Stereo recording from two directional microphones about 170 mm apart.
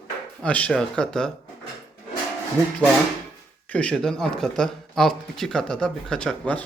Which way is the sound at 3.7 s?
5° left (ahead or behind).